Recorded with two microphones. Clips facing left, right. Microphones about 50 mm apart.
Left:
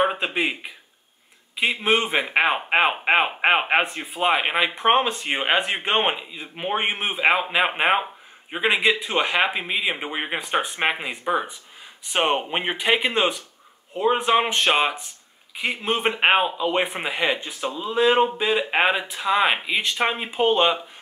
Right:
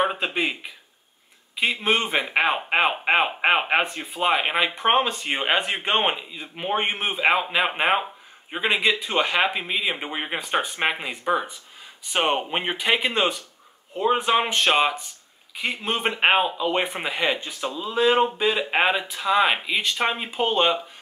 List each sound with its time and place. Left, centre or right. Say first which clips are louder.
0.0 s speech: left 1 dB; centre